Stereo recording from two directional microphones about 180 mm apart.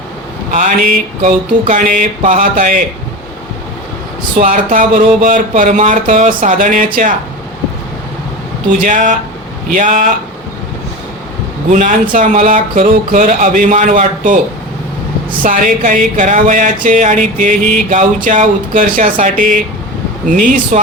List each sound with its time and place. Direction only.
0.5 s speech: 45° right (ahead or behind)
4.4 s speech: 50° right (ahead or behind)
8.8 s speech: 45° right (ahead or behind)
11.7 s speech: 45° right (ahead or behind)
15.4 s speech: 45° right (ahead or behind)